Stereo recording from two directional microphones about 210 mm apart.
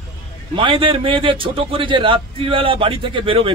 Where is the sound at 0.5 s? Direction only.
25° right (ahead or behind).